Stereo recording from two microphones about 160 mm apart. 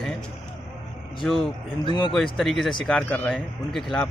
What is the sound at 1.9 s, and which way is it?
Speech, 30° left (ahead or behind).